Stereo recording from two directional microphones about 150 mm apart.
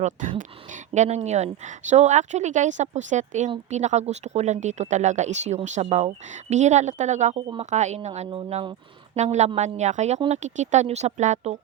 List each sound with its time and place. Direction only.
0.3 s speech: 55° right (ahead or behind)
7.3 s speech: 35° right (ahead or behind)
7.7 s speech: 50° right (ahead or behind)
9.1 s speech: 50° right (ahead or behind)